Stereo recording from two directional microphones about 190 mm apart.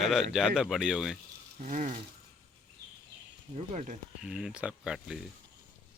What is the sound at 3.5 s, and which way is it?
Speech, 35° right (ahead or behind).